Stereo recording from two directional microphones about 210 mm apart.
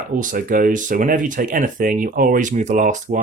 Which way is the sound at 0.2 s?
40° right (ahead or behind).